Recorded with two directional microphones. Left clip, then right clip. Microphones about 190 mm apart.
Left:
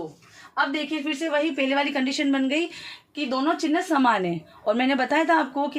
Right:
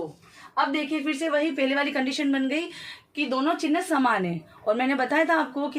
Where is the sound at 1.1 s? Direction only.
10° left (ahead or behind).